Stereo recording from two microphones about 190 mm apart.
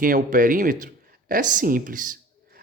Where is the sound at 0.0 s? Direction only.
45° right (ahead or behind).